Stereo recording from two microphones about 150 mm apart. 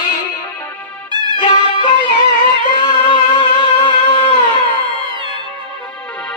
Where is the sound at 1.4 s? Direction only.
30° left (ahead or behind).